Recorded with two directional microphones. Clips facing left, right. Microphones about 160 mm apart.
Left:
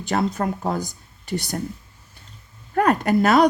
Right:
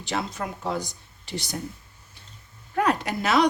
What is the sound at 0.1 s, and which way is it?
Speech, 50° left (ahead or behind).